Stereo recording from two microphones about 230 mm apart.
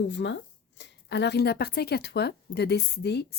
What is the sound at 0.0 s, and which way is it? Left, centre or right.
Speech, left.